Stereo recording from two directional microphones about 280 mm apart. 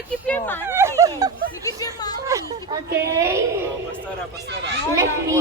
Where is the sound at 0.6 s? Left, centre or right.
Centre.